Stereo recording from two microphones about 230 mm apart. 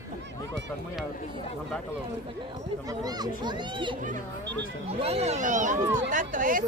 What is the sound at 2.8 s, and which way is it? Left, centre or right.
A child's voice, centre.